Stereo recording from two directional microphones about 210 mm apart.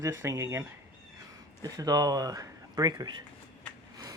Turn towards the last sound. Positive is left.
turn(degrees=-20)  # may be behind; listen again after turning